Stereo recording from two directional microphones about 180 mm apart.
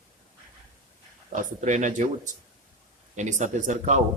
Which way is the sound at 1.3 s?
45° right (ahead or behind).